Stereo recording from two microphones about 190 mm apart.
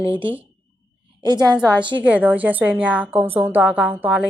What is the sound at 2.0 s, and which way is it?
Speech, 10° right (ahead or behind).